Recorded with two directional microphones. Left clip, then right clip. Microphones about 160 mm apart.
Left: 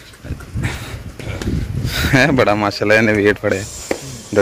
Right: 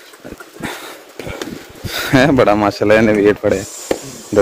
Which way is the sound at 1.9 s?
15° right (ahead or behind).